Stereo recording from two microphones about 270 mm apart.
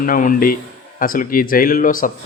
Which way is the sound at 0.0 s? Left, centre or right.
Left.